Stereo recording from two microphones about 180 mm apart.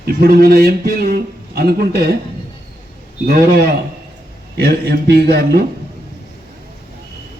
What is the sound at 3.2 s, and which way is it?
A man's voice, 60° right (ahead or behind).